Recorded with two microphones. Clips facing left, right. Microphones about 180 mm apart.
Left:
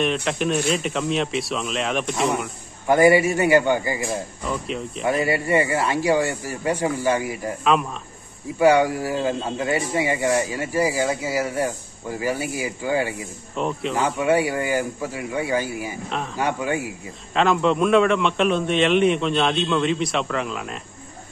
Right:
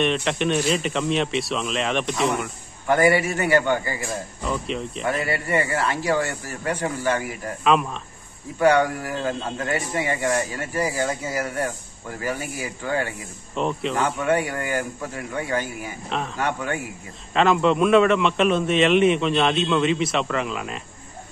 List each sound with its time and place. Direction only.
0.0 s a man's voice: centre (ahead or behind)
2.9 s speech: 15° left (ahead or behind)
4.6 s a man's voice: centre (ahead or behind)
5.2 s speech: 15° left (ahead or behind)
8.5 s speech: 10° left (ahead or behind)
13.6 s a man's voice: centre (ahead or behind)
17.3 s a man's voice: centre (ahead or behind)